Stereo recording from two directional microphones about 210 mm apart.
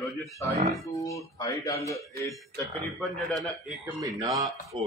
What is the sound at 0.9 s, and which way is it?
Speech, 15° left (ahead or behind).